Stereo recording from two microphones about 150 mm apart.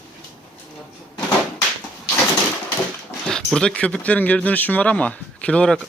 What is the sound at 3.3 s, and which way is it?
Speech, 5° left (ahead or behind).